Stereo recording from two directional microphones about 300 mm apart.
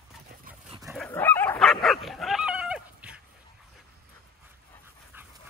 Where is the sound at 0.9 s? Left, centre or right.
Centre.